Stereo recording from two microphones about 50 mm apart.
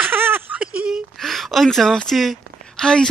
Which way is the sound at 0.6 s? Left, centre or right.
Right.